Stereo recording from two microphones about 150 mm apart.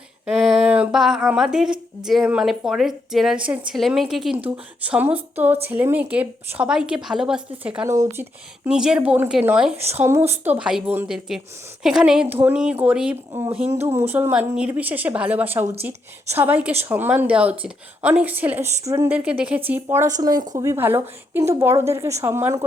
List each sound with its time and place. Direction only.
0.3 s a woman's voice: centre (ahead or behind)
8.1 s speech: 15° right (ahead or behind)
8.7 s speech: 5° right (ahead or behind)